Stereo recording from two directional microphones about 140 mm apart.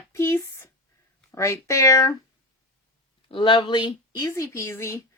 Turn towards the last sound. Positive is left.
turn(degrees=20)  # may be behind; listen again after turning